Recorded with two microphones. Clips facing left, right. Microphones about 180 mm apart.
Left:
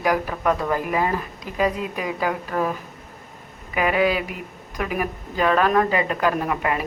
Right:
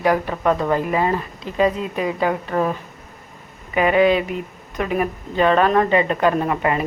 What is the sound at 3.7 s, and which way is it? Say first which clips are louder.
Speech: right 5 dB; 5° left (ahead or behind).